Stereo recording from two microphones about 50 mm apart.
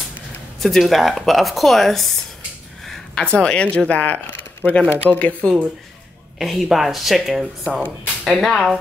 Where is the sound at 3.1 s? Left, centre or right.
Centre.